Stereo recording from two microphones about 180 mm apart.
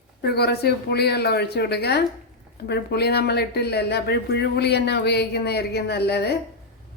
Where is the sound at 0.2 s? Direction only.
60° left (ahead or behind).